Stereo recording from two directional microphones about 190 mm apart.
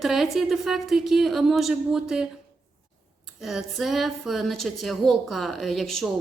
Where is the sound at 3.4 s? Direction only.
Centre (ahead or behind).